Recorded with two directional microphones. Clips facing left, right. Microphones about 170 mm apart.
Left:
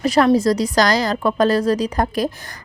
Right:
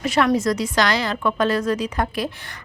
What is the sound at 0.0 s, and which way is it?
A woman's voice, 35° left (ahead or behind).